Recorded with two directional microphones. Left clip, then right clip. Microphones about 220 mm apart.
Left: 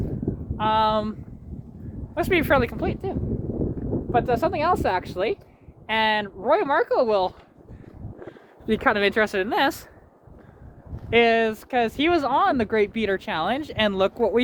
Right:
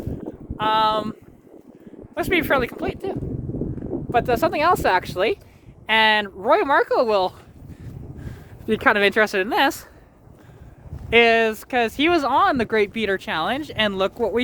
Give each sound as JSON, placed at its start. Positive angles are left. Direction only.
{"t": 0.5, "sound": "speech", "side_deg": -10}
{"t": 2.1, "sound": "speech", "side_deg": 0}
{"t": 4.1, "sound": "speech", "side_deg": -40}
{"t": 7.8, "sound": "a sound", "side_deg": -30}
{"t": 11.1, "sound": "speech", "side_deg": -25}